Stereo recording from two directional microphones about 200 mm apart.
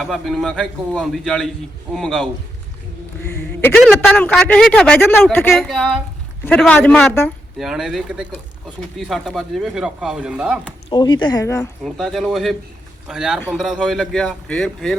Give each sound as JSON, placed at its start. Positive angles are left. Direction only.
{"t": 0.0, "sound": "a man's voice", "side_deg": 0}
{"t": 3.3, "sound": "a sound", "side_deg": 10}
{"t": 3.8, "sound": "a man's voice", "side_deg": 5}
{"t": 7.6, "sound": "a man's voice", "side_deg": 0}
{"t": 10.8, "sound": "speech", "side_deg": 20}
{"t": 11.8, "sound": "a man's voice", "side_deg": 0}